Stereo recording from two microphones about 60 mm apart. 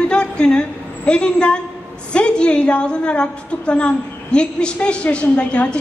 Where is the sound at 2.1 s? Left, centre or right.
Centre.